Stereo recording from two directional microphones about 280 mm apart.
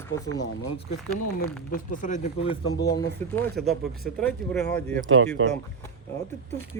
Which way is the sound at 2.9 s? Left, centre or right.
Centre.